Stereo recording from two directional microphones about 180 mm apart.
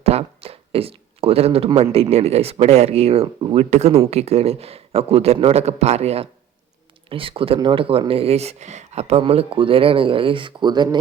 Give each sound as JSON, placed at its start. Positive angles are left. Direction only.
{"t": 0.0, "sound": "speech", "side_deg": -35}